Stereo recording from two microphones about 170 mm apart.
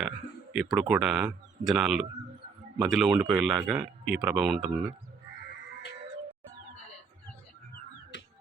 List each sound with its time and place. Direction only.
0.5 s speech: 5° right (ahead or behind)
8.1 s music: 90° left